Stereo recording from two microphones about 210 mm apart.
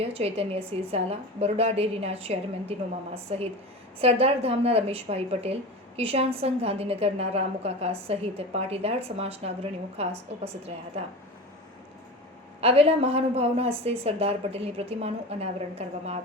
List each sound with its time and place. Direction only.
0.0 s a woman's voice: 30° right (ahead or behind)
12.5 s a woman's voice: 30° right (ahead or behind)